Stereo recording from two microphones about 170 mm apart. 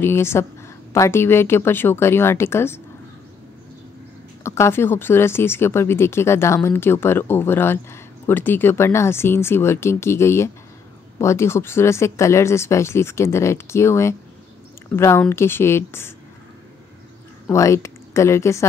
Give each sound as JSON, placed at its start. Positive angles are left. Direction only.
{"t": 0.0, "sound": "speech", "side_deg": 15}
{"t": 4.4, "sound": "speech", "side_deg": 15}
{"t": 17.5, "sound": "speech", "side_deg": 15}